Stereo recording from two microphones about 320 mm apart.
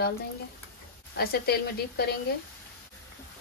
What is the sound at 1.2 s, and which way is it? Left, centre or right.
Speech, left.